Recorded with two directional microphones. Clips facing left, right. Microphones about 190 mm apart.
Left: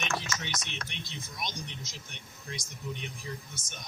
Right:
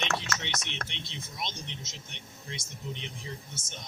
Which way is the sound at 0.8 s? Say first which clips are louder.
Even; 25° right (ahead or behind).